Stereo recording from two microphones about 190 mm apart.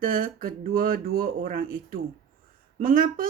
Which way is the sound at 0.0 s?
45° right (ahead or behind).